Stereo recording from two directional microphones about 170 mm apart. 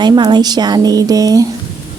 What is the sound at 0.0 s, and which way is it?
Speech, 25° right (ahead or behind).